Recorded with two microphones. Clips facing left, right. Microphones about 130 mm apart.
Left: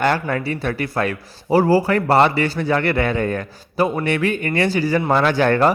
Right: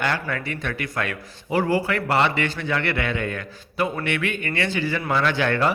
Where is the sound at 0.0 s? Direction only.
40° left (ahead or behind).